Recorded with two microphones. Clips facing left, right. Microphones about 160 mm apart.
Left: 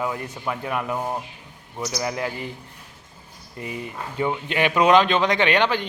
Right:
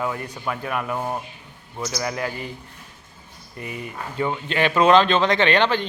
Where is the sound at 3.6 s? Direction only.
25° left (ahead or behind).